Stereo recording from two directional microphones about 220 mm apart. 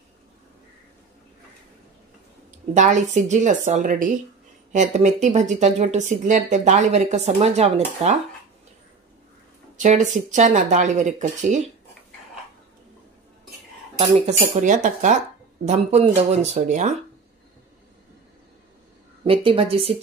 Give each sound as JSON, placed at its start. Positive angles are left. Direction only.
{"t": 2.7, "sound": "speech", "side_deg": -35}
{"t": 9.8, "sound": "speech", "side_deg": -35}
{"t": 13.9, "sound": "speech", "side_deg": -30}
{"t": 19.2, "sound": "a woman's voice", "side_deg": -25}